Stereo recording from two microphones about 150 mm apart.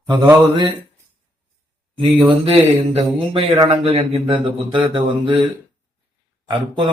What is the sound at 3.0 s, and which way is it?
Speech, 35° right (ahead or behind).